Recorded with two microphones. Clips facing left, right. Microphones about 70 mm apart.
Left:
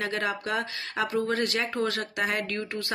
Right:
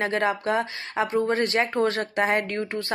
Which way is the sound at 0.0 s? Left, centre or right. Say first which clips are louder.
Right 5 dB; right.